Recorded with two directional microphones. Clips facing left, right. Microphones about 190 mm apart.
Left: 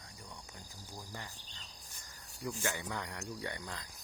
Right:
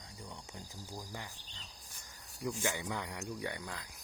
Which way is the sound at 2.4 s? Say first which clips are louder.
Right 2 dB; 15° right (ahead or behind).